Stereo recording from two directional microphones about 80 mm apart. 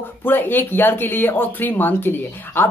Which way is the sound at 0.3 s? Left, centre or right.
Left.